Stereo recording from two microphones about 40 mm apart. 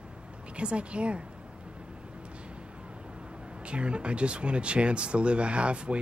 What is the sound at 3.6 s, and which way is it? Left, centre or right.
Speech, right.